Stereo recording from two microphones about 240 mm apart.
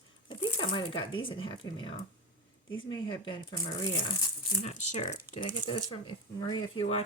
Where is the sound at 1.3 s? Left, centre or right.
Centre.